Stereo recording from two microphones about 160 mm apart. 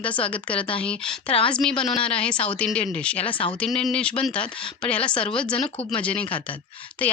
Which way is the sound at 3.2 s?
35° left (ahead or behind).